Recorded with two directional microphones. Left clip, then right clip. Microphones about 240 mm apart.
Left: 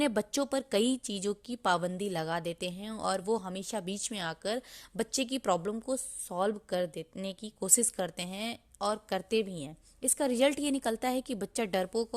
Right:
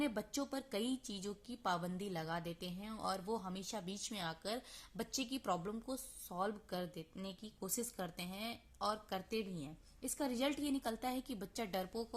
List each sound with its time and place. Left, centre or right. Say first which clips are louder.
0.0 s a woman's voice: left 10 dB; left